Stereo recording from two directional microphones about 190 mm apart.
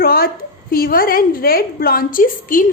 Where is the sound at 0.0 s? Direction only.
50° left (ahead or behind).